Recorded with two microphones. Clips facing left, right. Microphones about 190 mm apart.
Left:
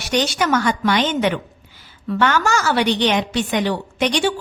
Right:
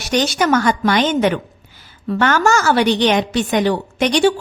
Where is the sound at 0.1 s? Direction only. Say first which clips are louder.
Right 3 dB; 45° right (ahead or behind).